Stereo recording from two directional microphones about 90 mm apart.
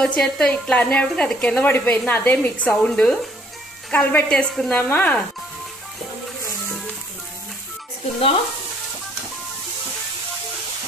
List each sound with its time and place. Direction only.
0.0 s speech: 5° left (ahead or behind)
3.9 s speech: 20° left (ahead or behind)